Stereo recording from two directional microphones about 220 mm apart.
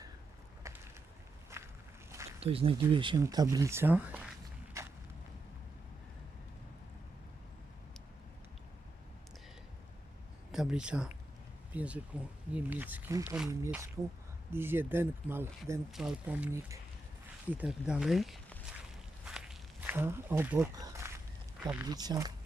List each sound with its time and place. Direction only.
0.7 s a sound: 15° right (ahead or behind)
1.5 s walk: 10° right (ahead or behind)
2.0 s a sound: 15° right (ahead or behind)
2.4 s speech: 25° right (ahead or behind); by 4.9 s 10° right (ahead or behind)
10.5 s speech: centre (ahead or behind)
19.2 s walk: 5° right (ahead or behind)
21.6 s speech: 10° right (ahead or behind)